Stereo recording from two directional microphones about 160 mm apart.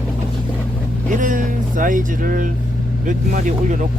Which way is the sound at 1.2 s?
55° right (ahead or behind).